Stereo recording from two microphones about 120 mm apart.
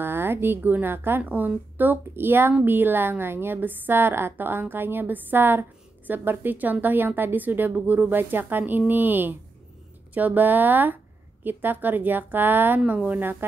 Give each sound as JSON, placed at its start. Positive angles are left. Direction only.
{"t": 0.0, "sound": "a woman's voice", "side_deg": -20}